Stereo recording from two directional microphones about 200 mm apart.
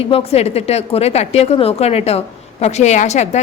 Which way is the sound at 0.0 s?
30° left (ahead or behind).